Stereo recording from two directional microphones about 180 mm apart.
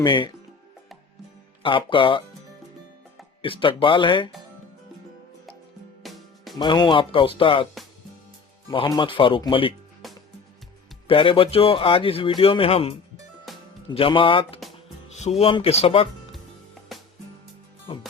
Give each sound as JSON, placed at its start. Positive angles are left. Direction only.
{"t": 0.0, "sound": "speech", "side_deg": 25}
{"t": 1.6, "sound": "speech", "side_deg": 30}
{"t": 3.4, "sound": "speech", "side_deg": 30}
{"t": 6.0, "sound": "music", "side_deg": 0}
{"t": 6.6, "sound": "speech", "side_deg": 25}
{"t": 9.0, "sound": "speech", "side_deg": 30}
{"t": 10.0, "sound": "music", "side_deg": 0}
{"t": 11.1, "sound": "speech", "side_deg": 30}
{"t": 13.5, "sound": "music", "side_deg": 0}
{"t": 13.9, "sound": "speech", "side_deg": 30}
{"t": 16.9, "sound": "music", "side_deg": 0}
{"t": 17.9, "sound": "speech", "side_deg": 30}